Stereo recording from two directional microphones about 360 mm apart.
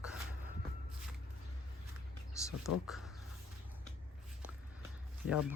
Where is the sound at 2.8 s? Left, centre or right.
Centre.